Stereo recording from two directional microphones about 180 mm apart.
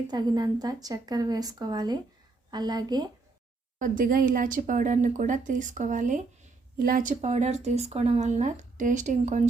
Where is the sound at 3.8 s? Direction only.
50° right (ahead or behind).